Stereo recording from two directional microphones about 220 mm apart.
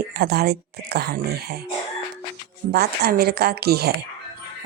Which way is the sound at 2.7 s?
45° right (ahead or behind).